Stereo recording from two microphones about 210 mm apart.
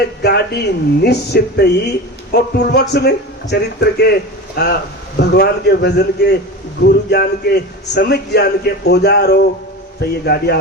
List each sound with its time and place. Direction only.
0.0 s speech: 50° left (ahead or behind)